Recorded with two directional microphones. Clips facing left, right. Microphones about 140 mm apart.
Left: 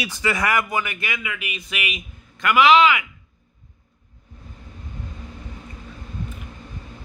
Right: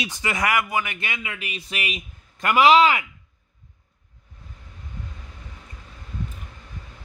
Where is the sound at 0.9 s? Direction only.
25° right (ahead or behind).